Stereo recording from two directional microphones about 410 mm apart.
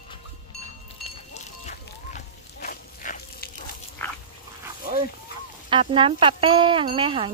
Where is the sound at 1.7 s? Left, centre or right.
Centre.